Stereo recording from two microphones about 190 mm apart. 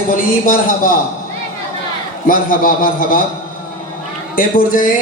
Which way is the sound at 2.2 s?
50° left (ahead or behind).